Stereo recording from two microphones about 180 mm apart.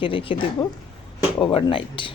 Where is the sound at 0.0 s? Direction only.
30° left (ahead or behind).